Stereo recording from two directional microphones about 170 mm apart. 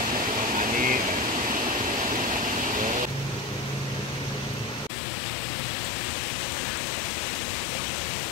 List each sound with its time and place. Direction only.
0.6 s air conditioning: 50° right (ahead or behind)